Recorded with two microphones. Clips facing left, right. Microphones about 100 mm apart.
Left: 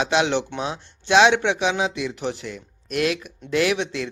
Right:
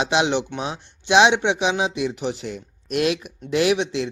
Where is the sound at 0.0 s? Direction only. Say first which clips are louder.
Even; 20° right (ahead or behind).